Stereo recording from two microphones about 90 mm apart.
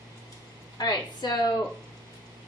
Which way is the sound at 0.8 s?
50° left (ahead or behind).